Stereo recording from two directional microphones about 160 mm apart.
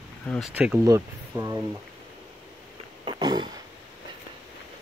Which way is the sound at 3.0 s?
25° right (ahead or behind).